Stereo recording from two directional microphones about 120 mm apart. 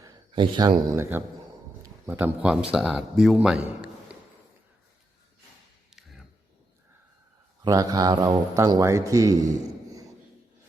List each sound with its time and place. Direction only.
0.3 s a man's voice: 40° right (ahead or behind)
1.1 s speech: 20° right (ahead or behind)
5.9 s a sound: 5° right (ahead or behind)
7.6 s speech: 30° right (ahead or behind)